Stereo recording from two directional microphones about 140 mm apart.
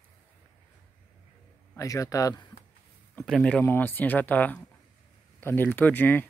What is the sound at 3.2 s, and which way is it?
Speech, 5° left (ahead or behind).